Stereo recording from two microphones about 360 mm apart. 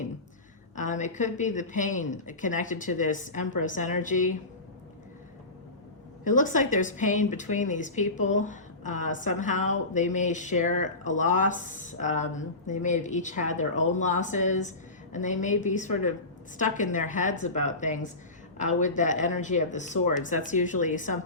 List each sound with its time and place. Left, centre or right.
0.8 s speech: centre
6.3 s speech: left